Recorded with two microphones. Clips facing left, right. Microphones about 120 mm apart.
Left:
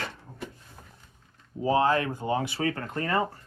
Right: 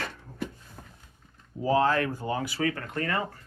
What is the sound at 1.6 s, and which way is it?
Speech, 20° left (ahead or behind).